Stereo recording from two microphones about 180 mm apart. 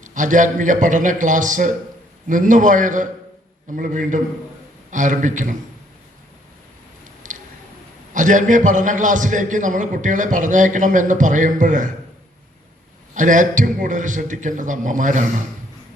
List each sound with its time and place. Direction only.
0.0 s a man's voice: 45° right (ahead or behind)
7.2 s a sound: 45° right (ahead or behind)
8.1 s a man's voice: 45° right (ahead or behind)
13.1 s a man's voice: 45° right (ahead or behind)